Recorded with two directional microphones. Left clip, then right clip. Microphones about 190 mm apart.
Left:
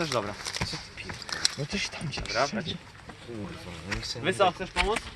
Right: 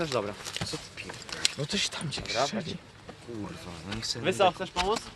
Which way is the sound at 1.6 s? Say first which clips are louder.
Right 2 dB; 10° right (ahead or behind).